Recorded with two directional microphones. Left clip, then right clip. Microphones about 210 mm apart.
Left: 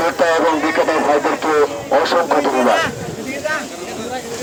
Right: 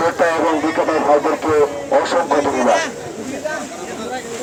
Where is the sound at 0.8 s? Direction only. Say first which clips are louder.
Right 2 dB; 10° left (ahead or behind).